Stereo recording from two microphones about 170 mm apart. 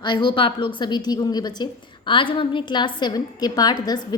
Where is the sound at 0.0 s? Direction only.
25° left (ahead or behind).